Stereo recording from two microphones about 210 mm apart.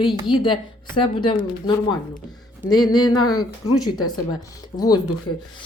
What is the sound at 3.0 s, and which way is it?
Speech, 90° left.